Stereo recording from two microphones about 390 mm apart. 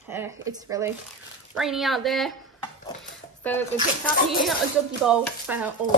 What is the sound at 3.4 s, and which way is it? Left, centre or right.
Speech, centre.